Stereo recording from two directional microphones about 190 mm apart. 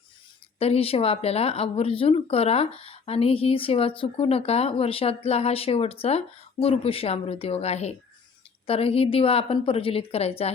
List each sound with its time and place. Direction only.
0.6 s speech: 30° left (ahead or behind)